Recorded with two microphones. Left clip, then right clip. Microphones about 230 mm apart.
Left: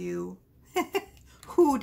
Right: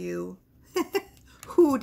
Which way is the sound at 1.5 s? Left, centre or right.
Centre.